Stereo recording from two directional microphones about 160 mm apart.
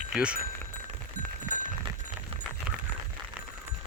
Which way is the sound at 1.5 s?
20° right (ahead or behind).